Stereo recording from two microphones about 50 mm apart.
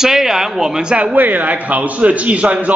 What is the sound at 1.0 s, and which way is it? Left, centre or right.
A man's voice, right.